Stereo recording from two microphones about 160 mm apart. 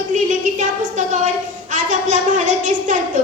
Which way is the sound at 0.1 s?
50° right (ahead or behind).